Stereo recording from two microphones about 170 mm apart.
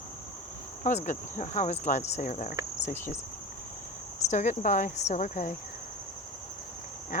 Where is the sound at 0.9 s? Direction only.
45° left (ahead or behind).